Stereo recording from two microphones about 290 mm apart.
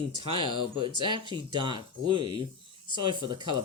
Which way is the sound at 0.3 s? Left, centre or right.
Centre.